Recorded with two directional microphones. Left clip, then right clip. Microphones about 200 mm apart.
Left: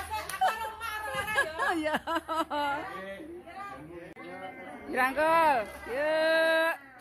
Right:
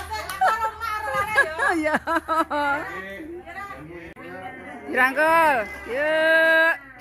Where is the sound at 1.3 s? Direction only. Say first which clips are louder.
Right 8 dB; 25° right (ahead or behind).